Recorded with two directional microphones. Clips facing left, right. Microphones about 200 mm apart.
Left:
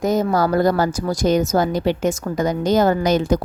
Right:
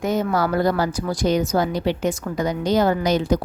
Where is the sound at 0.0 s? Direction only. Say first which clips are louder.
Left 3 dB; 40° left (ahead or behind).